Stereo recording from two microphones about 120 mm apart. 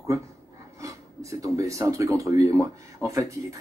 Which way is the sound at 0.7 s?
25° right (ahead or behind).